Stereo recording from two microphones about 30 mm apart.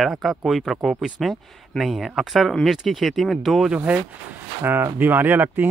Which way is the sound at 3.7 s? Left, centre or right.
Right.